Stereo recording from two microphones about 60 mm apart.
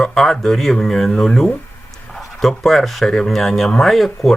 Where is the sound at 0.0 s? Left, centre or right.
Centre.